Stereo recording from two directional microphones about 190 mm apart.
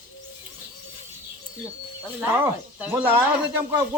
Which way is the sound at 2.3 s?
10° right (ahead or behind).